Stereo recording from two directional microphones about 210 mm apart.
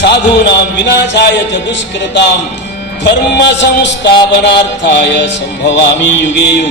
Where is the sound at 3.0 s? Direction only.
55° left (ahead or behind).